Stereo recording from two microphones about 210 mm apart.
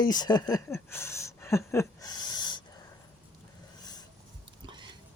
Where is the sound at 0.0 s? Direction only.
20° left (ahead or behind).